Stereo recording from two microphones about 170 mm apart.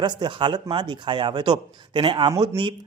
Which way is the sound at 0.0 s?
25° right (ahead or behind).